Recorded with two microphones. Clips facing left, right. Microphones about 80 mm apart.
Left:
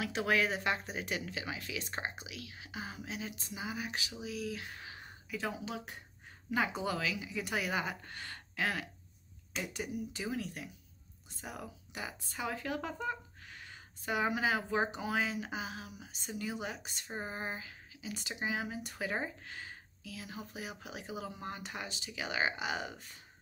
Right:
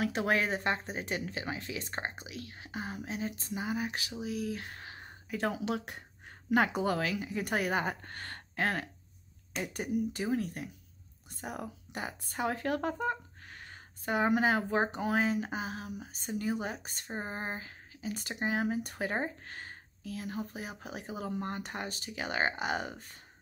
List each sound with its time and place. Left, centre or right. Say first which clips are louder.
0.0 s speech: right 2 dB; right
4.2 s a sound: right 5 dB; right
5.4 s speech: right 7 dB; right